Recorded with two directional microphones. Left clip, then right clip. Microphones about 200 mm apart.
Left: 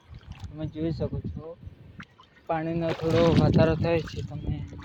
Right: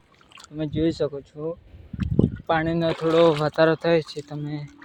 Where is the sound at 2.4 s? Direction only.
25° right (ahead or behind).